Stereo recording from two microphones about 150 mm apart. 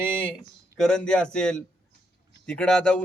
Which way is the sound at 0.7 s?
5° left (ahead or behind).